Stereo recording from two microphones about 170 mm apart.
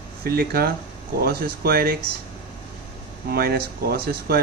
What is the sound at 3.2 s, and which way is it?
Speech, 65° right (ahead or behind).